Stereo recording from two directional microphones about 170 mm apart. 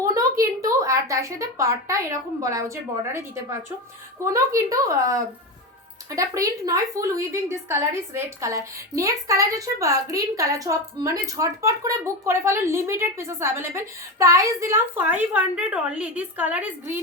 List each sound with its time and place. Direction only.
0.0 s a woman's voice: 20° right (ahead or behind)